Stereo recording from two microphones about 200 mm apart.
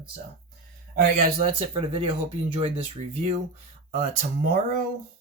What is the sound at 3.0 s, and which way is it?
Speech, 40° right (ahead or behind).